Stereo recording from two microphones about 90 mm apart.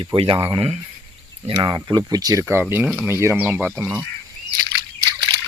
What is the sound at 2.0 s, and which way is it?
Speech, 45° right (ahead or behind).